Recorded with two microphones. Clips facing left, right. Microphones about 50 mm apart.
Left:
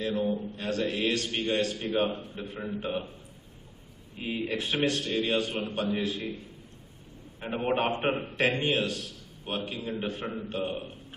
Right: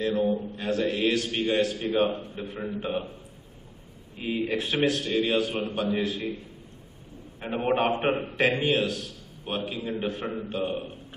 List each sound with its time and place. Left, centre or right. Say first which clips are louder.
0.0 s a man's voice: right 4 dB; centre
4.2 s a man's voice: right 3 dB; centre